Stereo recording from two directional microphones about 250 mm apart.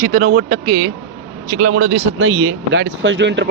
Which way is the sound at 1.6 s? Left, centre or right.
Right.